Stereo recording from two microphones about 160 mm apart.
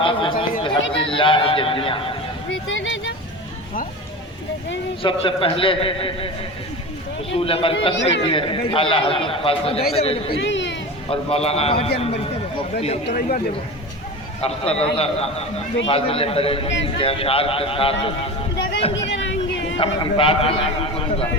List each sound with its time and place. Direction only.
0.0 s a man's voice: 30° left (ahead or behind)
5.0 s a man's voice: 35° left (ahead or behind)
7.3 s a man's voice: 35° left (ahead or behind)
14.4 s a man's voice: 40° left (ahead or behind)
19.7 s a man's voice: 30° left (ahead or behind)